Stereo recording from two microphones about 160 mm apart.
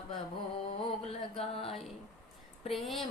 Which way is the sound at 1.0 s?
35° left (ahead or behind).